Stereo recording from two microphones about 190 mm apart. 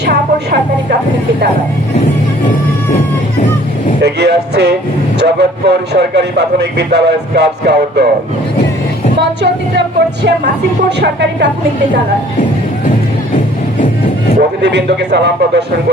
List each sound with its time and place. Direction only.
0.0 s a sound: 55° right (ahead or behind)
4.0 s speech: 60° right (ahead or behind)
9.1 s speech: 65° right (ahead or behind)
11.0 s speech: 65° right (ahead or behind)
14.6 s speech: 60° right (ahead or behind)